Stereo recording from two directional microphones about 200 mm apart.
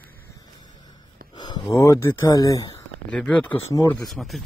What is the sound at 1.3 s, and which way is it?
Speech, 20° left (ahead or behind).